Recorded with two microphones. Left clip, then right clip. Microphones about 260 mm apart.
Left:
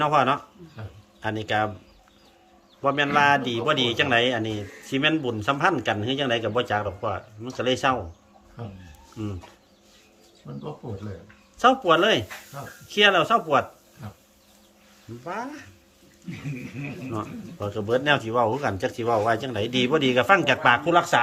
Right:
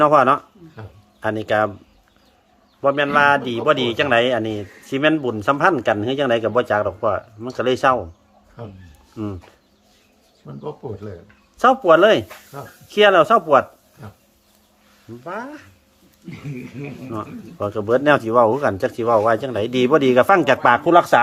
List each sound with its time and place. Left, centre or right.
0.0 s a man's voice: centre
2.8 s a man's voice: centre
10.5 s a man's voice: centre
15.2 s a man's voice: centre
17.1 s a man's voice: centre